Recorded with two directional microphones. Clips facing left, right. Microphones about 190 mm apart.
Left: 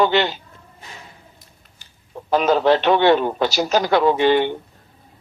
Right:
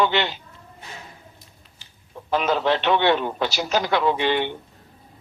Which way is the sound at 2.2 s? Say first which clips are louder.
Left 5 dB; 40° left (ahead or behind).